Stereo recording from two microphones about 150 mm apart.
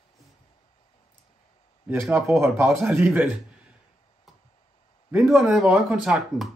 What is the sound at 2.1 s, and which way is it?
A man's voice, 20° right (ahead or behind).